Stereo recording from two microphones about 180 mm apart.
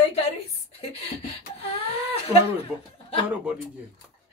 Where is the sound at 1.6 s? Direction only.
30° left (ahead or behind).